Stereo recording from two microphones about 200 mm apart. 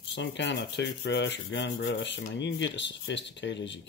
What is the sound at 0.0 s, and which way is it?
Rub, 60° left (ahead or behind).